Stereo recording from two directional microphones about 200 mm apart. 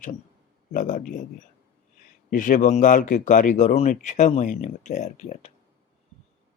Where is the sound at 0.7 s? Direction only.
40° left (ahead or behind).